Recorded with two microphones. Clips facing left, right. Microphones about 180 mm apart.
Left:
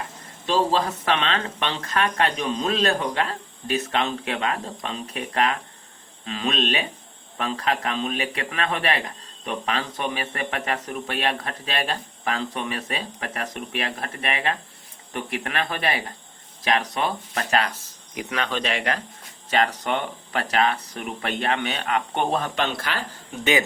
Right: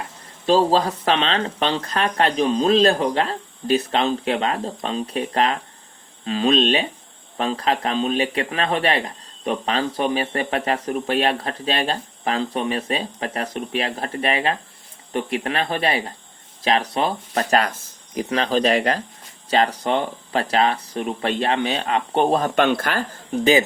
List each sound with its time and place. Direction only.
0.4 s speech: 35° right (ahead or behind)
22.5 s speech: 55° right (ahead or behind); by 23.6 s 35° right (ahead or behind)